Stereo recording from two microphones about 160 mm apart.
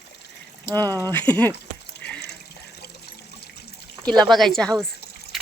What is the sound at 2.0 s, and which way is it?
Water, 90° left.